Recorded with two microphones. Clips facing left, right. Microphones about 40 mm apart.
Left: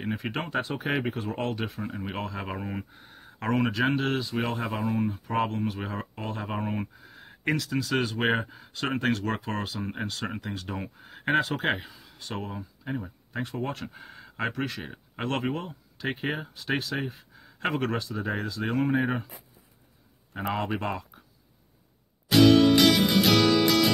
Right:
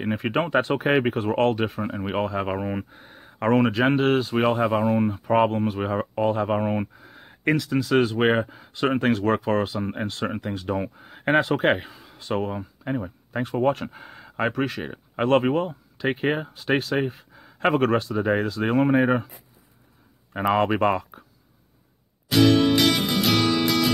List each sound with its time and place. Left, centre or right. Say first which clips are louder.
0.1 s speech: right 9 dB; right
1.6 s speech: right 7 dB; right
4.8 s speech: right 6 dB; right
5.2 s speech: right 8 dB; right; by 9.2 s centre
9.2 s speech: right 9 dB; right
9.6 s speech: right 7 dB; centre
11.3 s speech: right 6 dB; right
13.8 s speech: right 4 dB; right
20.5 s speech: right 10 dB; right
22.3 s music: even; centre